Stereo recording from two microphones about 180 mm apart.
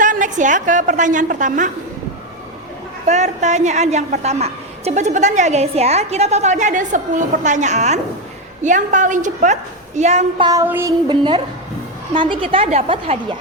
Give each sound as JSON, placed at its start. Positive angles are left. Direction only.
{"t": 0.0, "sound": "a woman's voice", "side_deg": -45}
{"t": 3.1, "sound": "a woman's voice", "side_deg": -40}
{"t": 10.4, "sound": "a sound", "side_deg": -15}
{"t": 11.1, "sound": "a woman's voice", "side_deg": -25}